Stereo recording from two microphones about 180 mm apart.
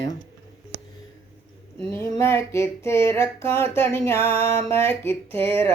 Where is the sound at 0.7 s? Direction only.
80° right.